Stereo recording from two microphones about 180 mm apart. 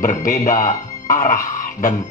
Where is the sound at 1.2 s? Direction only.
45° left (ahead or behind).